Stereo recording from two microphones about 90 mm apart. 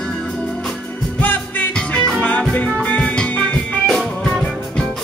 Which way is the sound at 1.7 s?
10° left (ahead or behind).